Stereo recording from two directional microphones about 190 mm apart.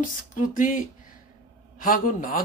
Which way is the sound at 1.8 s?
45° left (ahead or behind).